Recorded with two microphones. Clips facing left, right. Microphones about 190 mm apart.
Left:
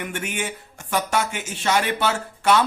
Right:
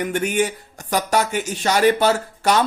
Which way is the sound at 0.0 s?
40° right (ahead or behind).